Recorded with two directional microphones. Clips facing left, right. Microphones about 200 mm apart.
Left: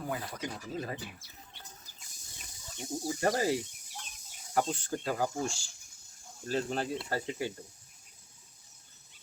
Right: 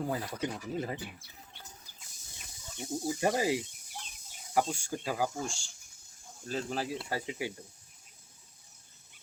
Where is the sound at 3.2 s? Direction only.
15° right (ahead or behind).